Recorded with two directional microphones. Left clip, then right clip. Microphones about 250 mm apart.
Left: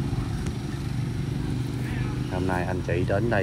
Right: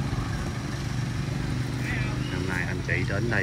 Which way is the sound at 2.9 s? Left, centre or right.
Centre.